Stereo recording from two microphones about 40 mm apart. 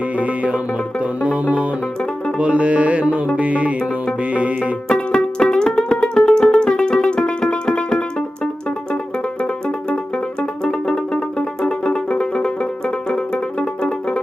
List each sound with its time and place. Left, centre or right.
0.2 s music: right
4.9 s music: centre
9.4 s music: left
12.2 s banjo: left
13.1 s music: left